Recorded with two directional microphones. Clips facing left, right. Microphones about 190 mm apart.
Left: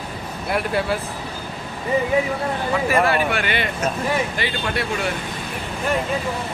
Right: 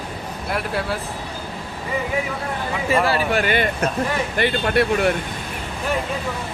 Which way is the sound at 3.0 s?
35° right (ahead or behind).